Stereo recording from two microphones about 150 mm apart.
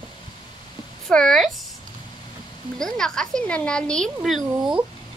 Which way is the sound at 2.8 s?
5° left (ahead or behind).